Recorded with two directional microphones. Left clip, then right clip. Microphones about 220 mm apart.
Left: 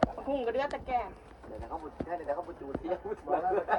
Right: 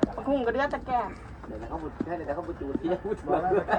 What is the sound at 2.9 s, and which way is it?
Speech, 50° right (ahead or behind).